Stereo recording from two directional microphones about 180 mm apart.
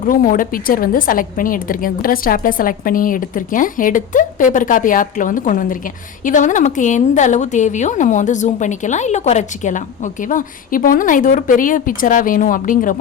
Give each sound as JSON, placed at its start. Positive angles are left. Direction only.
{"t": 0.0, "sound": "a woman's voice", "side_deg": 50}